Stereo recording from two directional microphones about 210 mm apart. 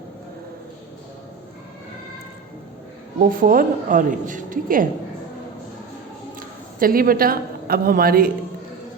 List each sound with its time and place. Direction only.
3.2 s a woman's voice: 40° right (ahead or behind)
6.7 s a woman's voice: 45° right (ahead or behind)